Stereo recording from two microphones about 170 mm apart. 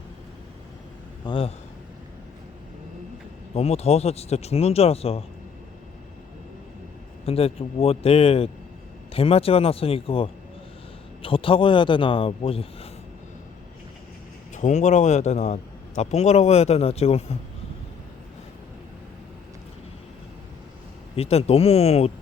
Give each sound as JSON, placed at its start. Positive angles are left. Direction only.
{"t": 1.2, "sound": "a man's voice", "side_deg": 30}
{"t": 3.5, "sound": "a man's voice", "side_deg": 35}
{"t": 7.3, "sound": "a man's voice", "side_deg": 35}
{"t": 14.5, "sound": "a man's voice", "side_deg": 45}
{"t": 21.2, "sound": "a man's voice", "side_deg": 35}